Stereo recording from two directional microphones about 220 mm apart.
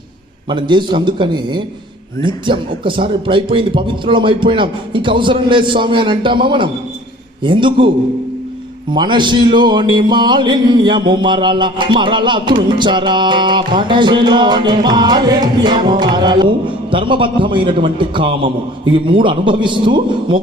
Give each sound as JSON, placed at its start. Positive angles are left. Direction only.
{"t": 0.5, "sound": "a man's voice", "side_deg": -20}
{"t": 8.9, "sound": "a man's voice", "side_deg": -20}